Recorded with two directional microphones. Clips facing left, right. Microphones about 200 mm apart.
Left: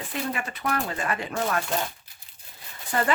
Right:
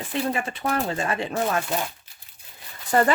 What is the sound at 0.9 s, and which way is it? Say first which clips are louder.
Speech: right 3 dB; 25° right (ahead or behind).